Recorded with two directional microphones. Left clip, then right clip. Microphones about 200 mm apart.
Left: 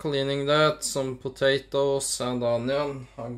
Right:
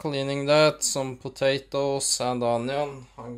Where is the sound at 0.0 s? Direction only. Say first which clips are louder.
Left 1 dB; 25° right (ahead or behind); by 2.9 s 40° right (ahead or behind).